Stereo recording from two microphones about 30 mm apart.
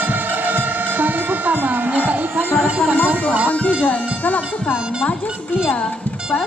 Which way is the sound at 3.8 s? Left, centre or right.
Left.